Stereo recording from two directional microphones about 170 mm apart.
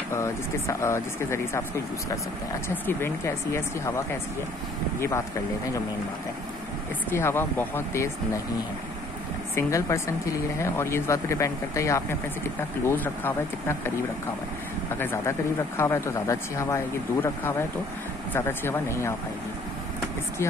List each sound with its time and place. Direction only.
0.1 s speech: 15° left (ahead or behind)
2.7 s speech: 15° left (ahead or behind)
7.1 s speech: 15° left (ahead or behind)
9.6 s speech: 15° left (ahead or behind)
15.0 s speech: 10° left (ahead or behind)